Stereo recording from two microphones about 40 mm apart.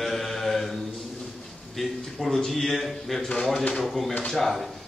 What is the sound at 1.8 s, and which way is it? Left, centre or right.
A man's voice, centre.